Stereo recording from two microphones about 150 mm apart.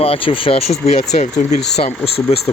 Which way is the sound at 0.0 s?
40° left (ahead or behind).